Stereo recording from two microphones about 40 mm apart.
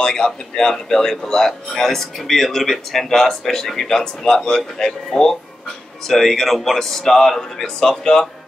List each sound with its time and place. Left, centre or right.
0.0 s speech: centre